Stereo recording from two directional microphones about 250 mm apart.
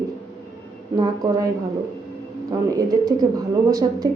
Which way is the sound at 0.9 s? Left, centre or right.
Centre.